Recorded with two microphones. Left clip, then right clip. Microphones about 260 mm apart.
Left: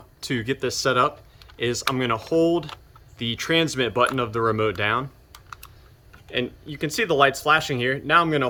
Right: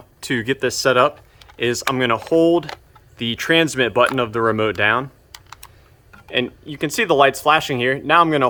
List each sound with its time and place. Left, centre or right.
0.2 s speech: centre
6.2 s speech: centre